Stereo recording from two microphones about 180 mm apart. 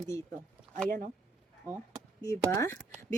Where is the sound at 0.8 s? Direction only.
50° right (ahead or behind).